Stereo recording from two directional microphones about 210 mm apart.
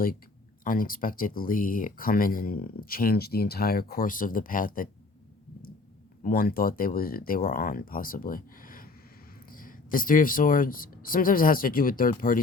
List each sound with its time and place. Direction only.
0.6 s speech: 40° left (ahead or behind)
6.2 s speech: 45° left (ahead or behind)